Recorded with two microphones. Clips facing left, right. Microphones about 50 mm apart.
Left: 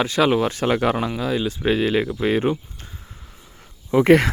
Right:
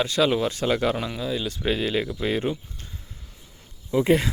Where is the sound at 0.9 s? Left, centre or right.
Left.